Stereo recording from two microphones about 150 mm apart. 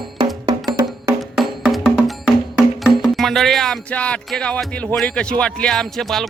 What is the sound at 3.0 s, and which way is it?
Speech, centre (ahead or behind).